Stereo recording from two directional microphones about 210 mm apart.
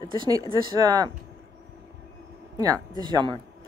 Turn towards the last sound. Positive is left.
turn(degrees=-20)  # may be behind; listen again after turning